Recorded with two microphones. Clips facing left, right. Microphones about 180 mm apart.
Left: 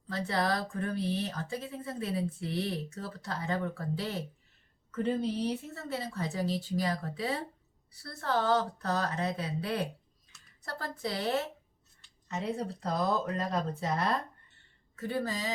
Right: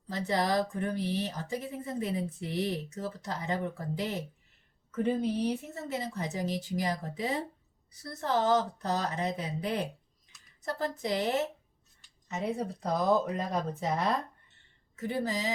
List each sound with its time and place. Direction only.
0.1 s a woman's voice: 20° right (ahead or behind)